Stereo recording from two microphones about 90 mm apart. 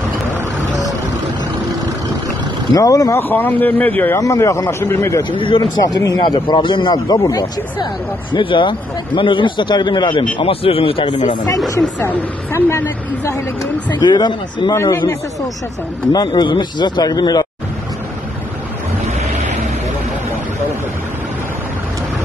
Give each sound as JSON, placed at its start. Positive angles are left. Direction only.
{"t": 2.7, "sound": "a man's voice", "side_deg": 40}
{"t": 3.2, "sound": "speech", "side_deg": 20}
{"t": 4.2, "sound": "a man's voice", "side_deg": 35}
{"t": 5.3, "sound": "speech", "side_deg": 70}
{"t": 5.9, "sound": "a man's voice", "side_deg": 50}
{"t": 7.1, "sound": "speech", "side_deg": 45}
{"t": 8.3, "sound": "a man's voice", "side_deg": 65}
{"t": 10.4, "sound": "speech", "side_deg": 90}
{"t": 12.5, "sound": "speech", "side_deg": 30}
{"t": 13.8, "sound": "a man's voice", "side_deg": 55}
{"t": 14.7, "sound": "a man's voice", "side_deg": 35}
{"t": 16.3, "sound": "a man's voice", "side_deg": 65}